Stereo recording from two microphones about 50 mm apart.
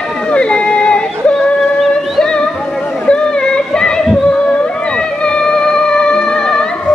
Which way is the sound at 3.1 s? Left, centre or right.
Centre.